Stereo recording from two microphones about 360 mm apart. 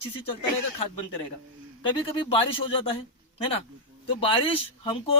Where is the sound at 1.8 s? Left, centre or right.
Centre.